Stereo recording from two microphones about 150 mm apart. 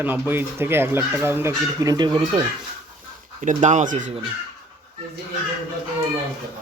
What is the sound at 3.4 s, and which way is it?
Speech, 55° right (ahead or behind).